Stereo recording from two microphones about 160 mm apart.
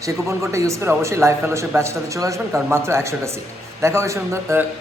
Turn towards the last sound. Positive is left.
turn(degrees=-15)  # may be behind; listen again after turning